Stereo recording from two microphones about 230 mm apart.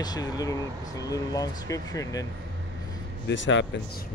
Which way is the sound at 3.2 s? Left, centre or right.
Left.